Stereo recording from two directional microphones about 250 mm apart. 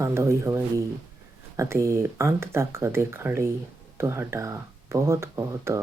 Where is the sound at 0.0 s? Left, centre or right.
Centre.